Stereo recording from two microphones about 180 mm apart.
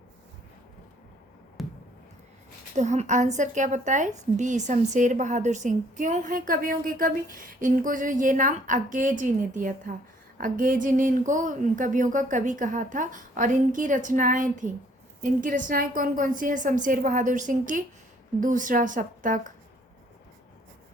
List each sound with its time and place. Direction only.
1.6 s basketball bounce: centre (ahead or behind)
2.7 s a woman's voice: 40° right (ahead or behind)